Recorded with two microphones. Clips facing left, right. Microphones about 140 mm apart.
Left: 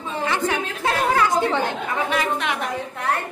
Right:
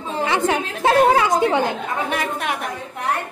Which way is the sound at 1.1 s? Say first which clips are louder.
Right 2 dB; 15° right (ahead or behind).